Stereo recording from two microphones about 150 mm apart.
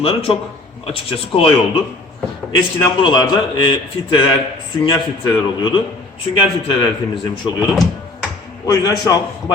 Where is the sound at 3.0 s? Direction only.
30° left (ahead or behind).